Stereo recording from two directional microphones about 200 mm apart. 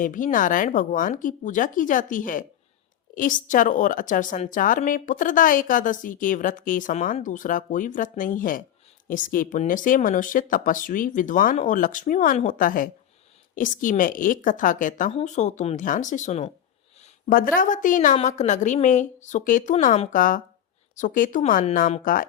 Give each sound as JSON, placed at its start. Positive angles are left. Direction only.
{"t": 0.0, "sound": "a woman's voice", "side_deg": 40}
{"t": 17.2, "sound": "a woman's voice", "side_deg": 45}